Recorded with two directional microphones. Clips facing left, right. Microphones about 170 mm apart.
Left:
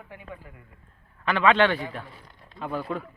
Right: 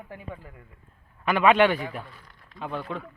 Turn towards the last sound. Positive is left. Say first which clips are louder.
# left 2 dB
turn(degrees=5)  # may be behind; listen again after turning